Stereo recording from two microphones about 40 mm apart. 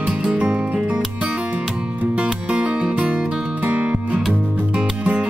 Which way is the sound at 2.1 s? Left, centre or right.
Right.